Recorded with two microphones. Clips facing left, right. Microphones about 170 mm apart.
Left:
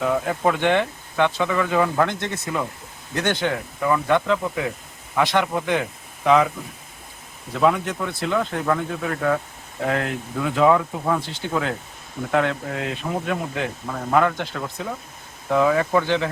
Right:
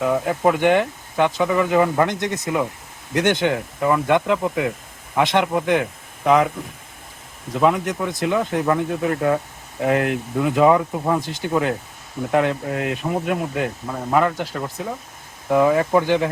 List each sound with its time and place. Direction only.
0.0 s speech: 5° right (ahead or behind)
6.2 s speech: 10° right (ahead or behind)
7.6 s speech: 10° right (ahead or behind)